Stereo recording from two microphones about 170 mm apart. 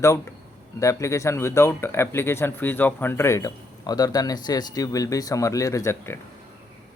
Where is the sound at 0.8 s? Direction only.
20° left (ahead or behind).